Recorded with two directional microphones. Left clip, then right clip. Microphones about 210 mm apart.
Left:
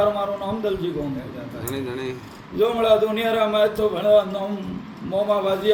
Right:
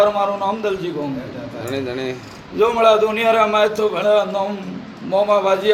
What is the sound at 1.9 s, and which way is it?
Speech, 40° left (ahead or behind).